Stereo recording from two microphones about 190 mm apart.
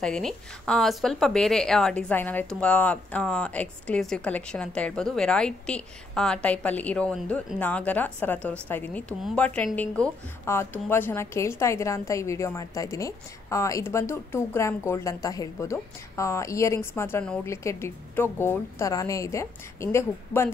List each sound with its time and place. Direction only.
0.0 s a woman's voice: 5° left (ahead or behind)